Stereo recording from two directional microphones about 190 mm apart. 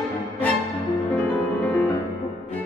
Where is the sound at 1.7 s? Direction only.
10° left (ahead or behind).